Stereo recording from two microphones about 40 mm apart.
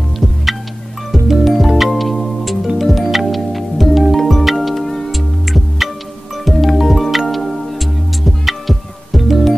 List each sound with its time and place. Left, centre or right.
1.1 s music: centre